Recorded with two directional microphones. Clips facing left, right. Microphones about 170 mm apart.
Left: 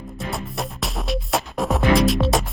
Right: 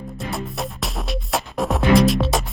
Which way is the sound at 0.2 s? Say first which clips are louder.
Right 1 dB; centre (ahead or behind).